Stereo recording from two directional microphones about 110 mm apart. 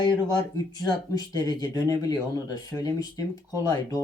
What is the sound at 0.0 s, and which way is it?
Speech, 35° left (ahead or behind).